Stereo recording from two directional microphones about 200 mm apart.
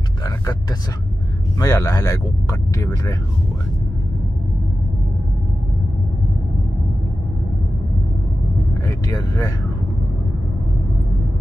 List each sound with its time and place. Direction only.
1.6 s speech: 15° left (ahead or behind)
8.8 s speech: 15° left (ahead or behind)